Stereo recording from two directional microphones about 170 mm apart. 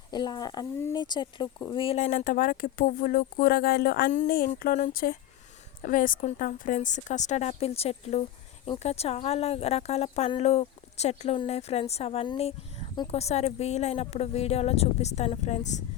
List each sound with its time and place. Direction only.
0.1 s a woman's voice: 25° left (ahead or behind)
2.0 s a woman's voice: 50° left (ahead or behind)